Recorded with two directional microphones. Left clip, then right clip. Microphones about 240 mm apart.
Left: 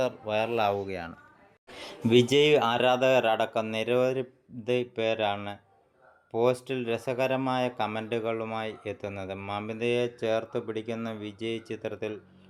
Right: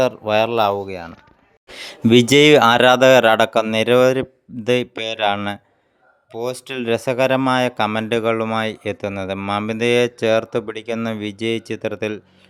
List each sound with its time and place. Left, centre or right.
0.0 s speech: right; by 1.1 s centre
1.6 s speech: right
6.6 s speech: right